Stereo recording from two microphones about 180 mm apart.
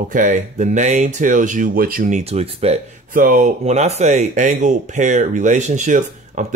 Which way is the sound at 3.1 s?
50° right (ahead or behind).